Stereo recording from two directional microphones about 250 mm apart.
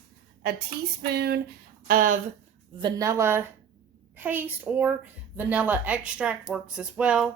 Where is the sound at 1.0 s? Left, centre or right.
Right.